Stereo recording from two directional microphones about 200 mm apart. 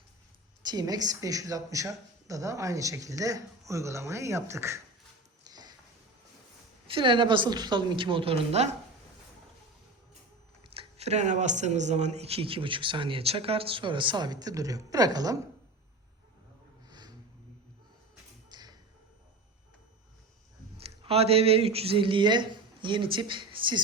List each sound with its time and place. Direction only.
0.6 s a woman's voice: 20° right (ahead or behind)
5.5 s a sound: 20° right (ahead or behind)
6.8 s speech: 25° right (ahead or behind)
10.6 s speech: 30° right (ahead or behind)
18.4 s tap: 20° right (ahead or behind)
20.8 s speech: 30° right (ahead or behind)